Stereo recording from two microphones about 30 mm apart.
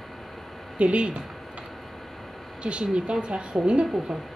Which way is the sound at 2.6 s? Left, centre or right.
Right.